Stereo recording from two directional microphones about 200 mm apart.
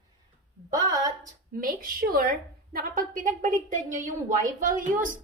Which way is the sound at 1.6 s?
45° right (ahead or behind).